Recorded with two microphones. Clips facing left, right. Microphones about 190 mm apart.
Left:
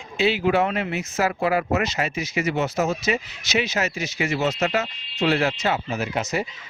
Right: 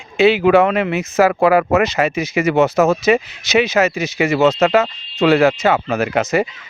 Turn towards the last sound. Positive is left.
turn(degrees=-90)